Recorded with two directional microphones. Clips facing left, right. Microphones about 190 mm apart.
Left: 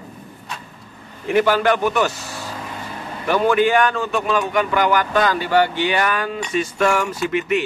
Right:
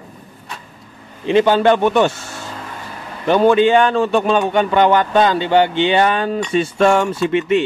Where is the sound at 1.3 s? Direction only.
20° right (ahead or behind).